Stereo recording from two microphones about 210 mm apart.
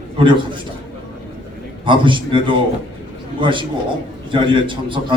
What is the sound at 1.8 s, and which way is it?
Speech, 25° right (ahead or behind).